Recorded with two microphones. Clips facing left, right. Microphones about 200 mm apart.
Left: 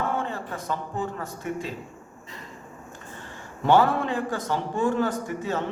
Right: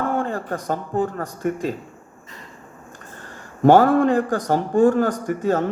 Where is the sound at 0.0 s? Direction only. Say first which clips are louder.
Right 5 dB; 45° right (ahead or behind).